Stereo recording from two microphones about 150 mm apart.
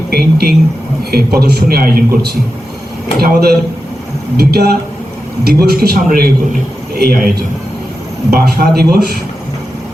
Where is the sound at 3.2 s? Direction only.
90° right.